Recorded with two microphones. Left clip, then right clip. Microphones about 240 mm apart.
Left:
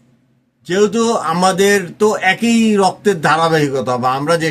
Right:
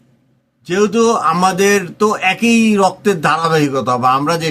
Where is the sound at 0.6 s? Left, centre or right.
Centre.